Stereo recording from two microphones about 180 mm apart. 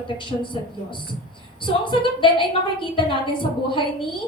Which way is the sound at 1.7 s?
25° left (ahead or behind).